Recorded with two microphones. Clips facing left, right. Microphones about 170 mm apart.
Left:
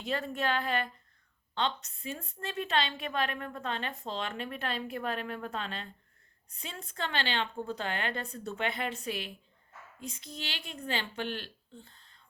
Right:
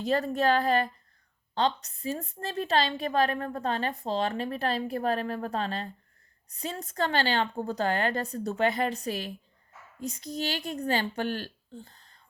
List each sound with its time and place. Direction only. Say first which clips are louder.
0.0 s a woman's voice: right 7 dB; 40° right (ahead or behind)